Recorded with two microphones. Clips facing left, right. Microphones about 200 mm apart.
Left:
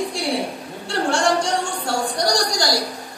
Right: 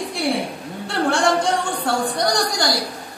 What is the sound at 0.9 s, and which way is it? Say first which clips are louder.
A woman's voice: right 1 dB; 55° right (ahead or behind).